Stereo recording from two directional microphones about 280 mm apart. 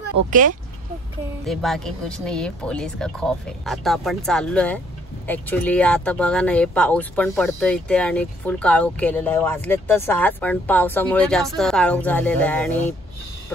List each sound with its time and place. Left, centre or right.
0.3 s speech: right
1.4 s speech: centre